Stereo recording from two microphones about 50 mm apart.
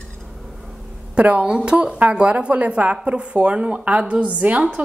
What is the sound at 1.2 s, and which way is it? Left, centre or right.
Speech, right.